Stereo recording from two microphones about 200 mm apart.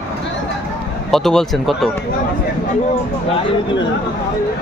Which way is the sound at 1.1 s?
Centre (ahead or behind).